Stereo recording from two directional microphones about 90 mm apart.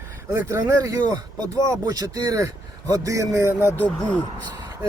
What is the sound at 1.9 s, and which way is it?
Speech, 45° right (ahead or behind).